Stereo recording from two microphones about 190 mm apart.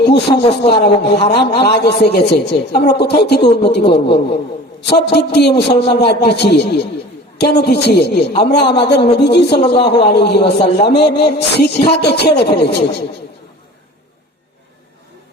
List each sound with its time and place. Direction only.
0.0 s a sound: 60° left (ahead or behind)
0.4 s a man's voice: 30° left (ahead or behind)
1.0 s a man's voice: 60° left (ahead or behind)